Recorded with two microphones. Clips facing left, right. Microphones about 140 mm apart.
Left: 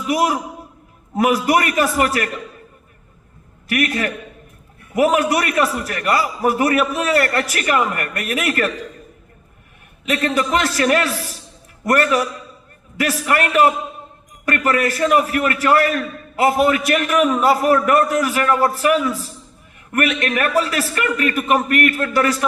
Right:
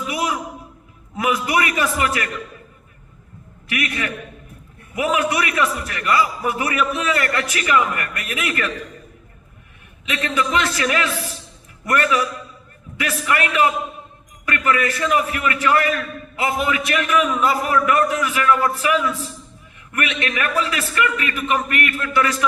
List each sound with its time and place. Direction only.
0.1 s a man's voice: 45° left (ahead or behind)
3.7 s a man's voice: 40° left (ahead or behind)
10.1 s a man's voice: 40° left (ahead or behind)